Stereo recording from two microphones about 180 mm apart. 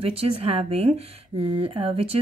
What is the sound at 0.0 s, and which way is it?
Speech, 35° right (ahead or behind).